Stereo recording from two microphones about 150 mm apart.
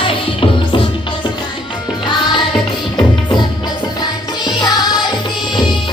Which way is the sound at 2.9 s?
30° left (ahead or behind).